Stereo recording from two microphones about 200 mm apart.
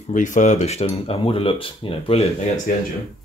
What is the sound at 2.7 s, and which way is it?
Speech, 45° left (ahead or behind).